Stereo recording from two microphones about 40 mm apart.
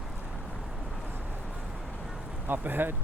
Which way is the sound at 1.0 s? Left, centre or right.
Right.